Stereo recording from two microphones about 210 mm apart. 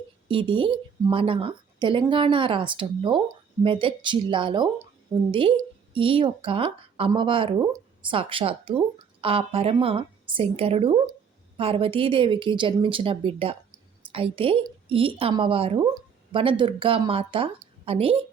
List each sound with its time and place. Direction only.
0.3 s a woman's voice: 25° right (ahead or behind)